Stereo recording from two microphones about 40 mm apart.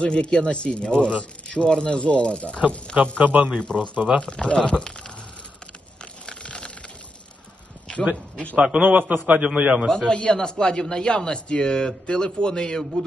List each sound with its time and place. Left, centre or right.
0.0 s a man's voice: left
3.2 s a man's voice: right
3.5 s a man's voice: left
6.2 s a sound: left
8.5 s a man's voice: right
9.1 s a man's voice: right
9.4 s a man's voice: right
9.8 s a man's voice: centre
10.1 s a man's voice: left